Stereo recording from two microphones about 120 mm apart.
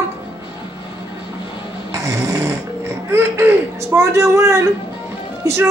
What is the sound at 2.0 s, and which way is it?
Speech, 25° right (ahead or behind).